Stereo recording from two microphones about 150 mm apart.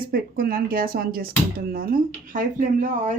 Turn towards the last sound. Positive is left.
turn(degrees=-55)  # may be behind; listen again after turning